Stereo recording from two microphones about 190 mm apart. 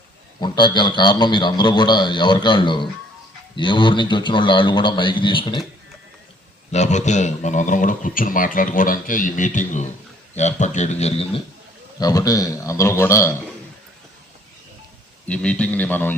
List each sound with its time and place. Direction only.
0.3 s a man's voice: 25° left (ahead or behind)
6.7 s a man's voice: 35° left (ahead or behind)
11.9 s a man's voice: 20° left (ahead or behind)
15.3 s a man's voice: 5° left (ahead or behind)